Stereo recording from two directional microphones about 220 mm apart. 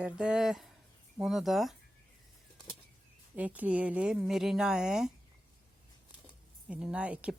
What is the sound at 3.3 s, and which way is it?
Speech, 5° right (ahead or behind).